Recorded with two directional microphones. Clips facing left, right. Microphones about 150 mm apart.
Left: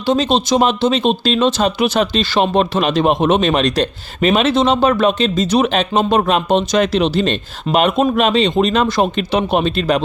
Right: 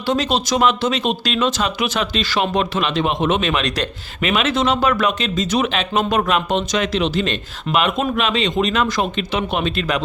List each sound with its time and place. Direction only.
0.0 s speech: 25° left (ahead or behind)